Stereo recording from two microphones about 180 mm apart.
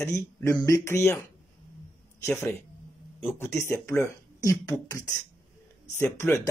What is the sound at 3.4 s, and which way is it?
Speech, 15° left (ahead or behind).